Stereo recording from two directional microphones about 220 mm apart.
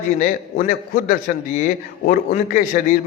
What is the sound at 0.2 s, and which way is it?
A man's voice, 40° left (ahead or behind).